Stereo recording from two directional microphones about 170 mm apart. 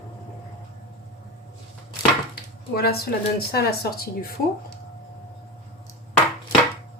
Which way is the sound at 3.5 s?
65° left (ahead or behind).